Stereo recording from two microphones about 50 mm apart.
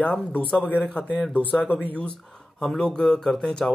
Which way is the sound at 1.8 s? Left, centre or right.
Left.